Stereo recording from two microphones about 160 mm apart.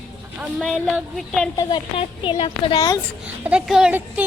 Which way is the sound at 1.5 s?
30° left (ahead or behind).